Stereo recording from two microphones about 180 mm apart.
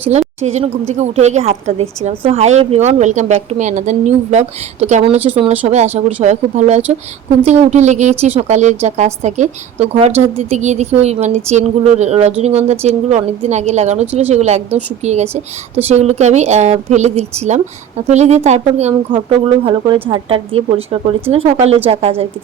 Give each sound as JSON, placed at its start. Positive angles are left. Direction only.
{"t": 0.0, "sound": "speech", "side_deg": -35}
{"t": 19.6, "sound": "speech", "side_deg": -25}